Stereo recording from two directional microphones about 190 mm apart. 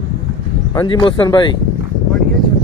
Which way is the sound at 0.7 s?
25° left (ahead or behind).